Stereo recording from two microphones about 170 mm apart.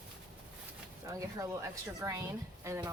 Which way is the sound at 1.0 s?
20° right (ahead or behind).